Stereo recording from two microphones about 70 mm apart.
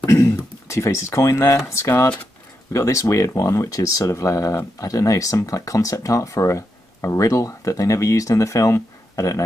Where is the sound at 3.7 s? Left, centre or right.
Left.